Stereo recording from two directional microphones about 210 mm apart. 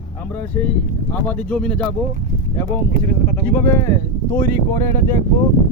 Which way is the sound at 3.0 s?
45° right (ahead or behind).